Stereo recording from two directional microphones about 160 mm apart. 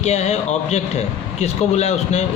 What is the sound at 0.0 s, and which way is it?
Speech, 45° left (ahead or behind).